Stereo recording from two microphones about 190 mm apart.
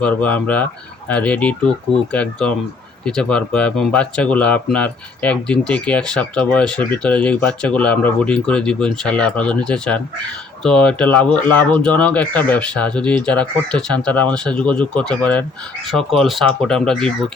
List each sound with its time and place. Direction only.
0.0 s speech: 5° left (ahead or behind)